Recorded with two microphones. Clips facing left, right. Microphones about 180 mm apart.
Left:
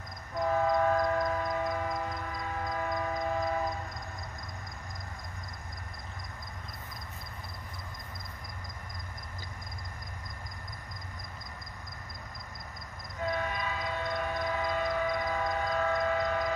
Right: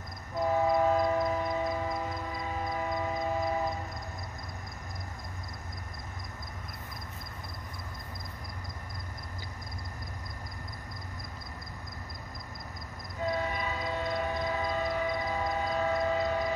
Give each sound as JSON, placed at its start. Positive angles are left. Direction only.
{"t": 0.4, "sound": "train", "side_deg": -10}
{"t": 13.2, "sound": "train", "side_deg": -25}
{"t": 16.2, "sound": "a sound", "side_deg": -15}